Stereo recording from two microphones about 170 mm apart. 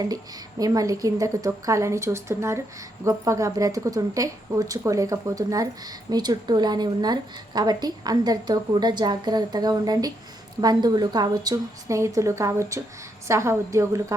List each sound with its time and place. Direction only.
0.6 s a woman's voice: 20° right (ahead or behind)